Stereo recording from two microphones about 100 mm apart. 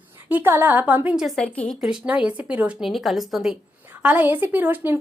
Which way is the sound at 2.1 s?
10° right (ahead or behind).